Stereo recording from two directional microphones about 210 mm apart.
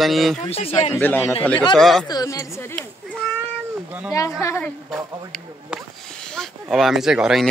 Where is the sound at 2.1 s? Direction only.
15° left (ahead or behind).